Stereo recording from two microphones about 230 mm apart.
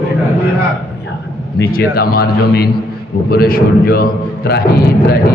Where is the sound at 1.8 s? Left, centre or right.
Left.